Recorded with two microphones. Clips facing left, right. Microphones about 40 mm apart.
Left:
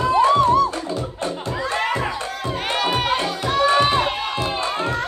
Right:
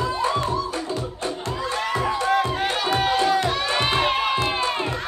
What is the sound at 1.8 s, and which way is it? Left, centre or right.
Music, left.